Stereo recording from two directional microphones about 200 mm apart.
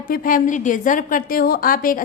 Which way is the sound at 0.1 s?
45° left (ahead or behind).